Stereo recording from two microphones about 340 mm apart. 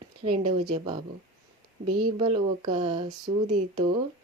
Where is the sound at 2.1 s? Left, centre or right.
Centre.